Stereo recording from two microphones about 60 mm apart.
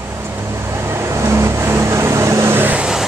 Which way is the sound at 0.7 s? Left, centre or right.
Right.